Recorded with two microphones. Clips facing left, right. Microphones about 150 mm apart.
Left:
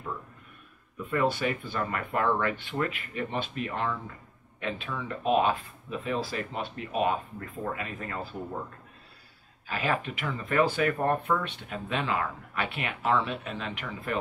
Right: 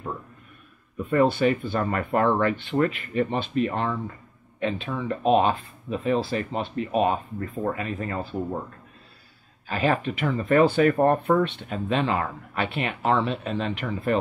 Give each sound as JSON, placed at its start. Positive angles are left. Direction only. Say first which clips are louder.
{"t": 1.2, "sound": "speech", "louder": "right 7 dB", "side_deg": -30}
{"t": 9.7, "sound": "speech", "louder": "right 6 dB", "side_deg": -35}
{"t": 10.6, "sound": "speech", "louder": "right 6 dB", "side_deg": -30}